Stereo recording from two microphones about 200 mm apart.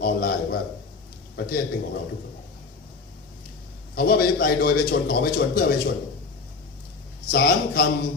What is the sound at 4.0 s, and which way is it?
A man's voice, 50° left (ahead or behind).